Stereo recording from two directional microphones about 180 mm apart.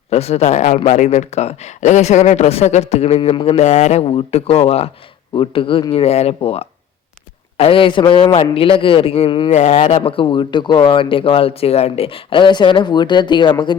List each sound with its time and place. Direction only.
0.1 s speech: 35° left (ahead or behind)